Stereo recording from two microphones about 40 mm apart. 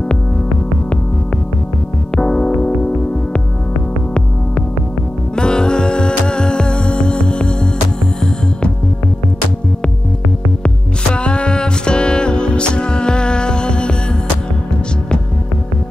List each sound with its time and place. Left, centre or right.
2.1 s music: centre
5.3 s music: left
11.1 s music: left